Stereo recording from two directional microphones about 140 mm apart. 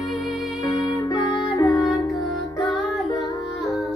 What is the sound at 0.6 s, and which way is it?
Music, 30° left (ahead or behind).